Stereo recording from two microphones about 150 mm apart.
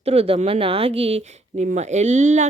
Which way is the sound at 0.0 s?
45° right (ahead or behind).